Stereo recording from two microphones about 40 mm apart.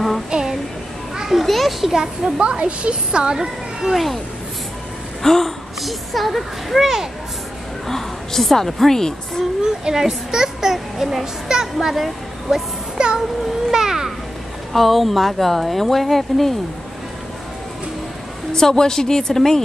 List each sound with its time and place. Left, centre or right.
0.3 s child singing: centre
1.1 s children playing: centre
1.4 s a child's voice: centre
2.0 s a child's voice: centre
2.4 s a woman's voice: right
3.8 s speech: centre
5.2 s a woman's voice: centre
7.9 s a woman's voice: centre
9.6 s a child's voice: centre
12.9 s music: centre
13.7 s children playing: centre
14.7 s speech: centre
18.5 s a woman's voice: centre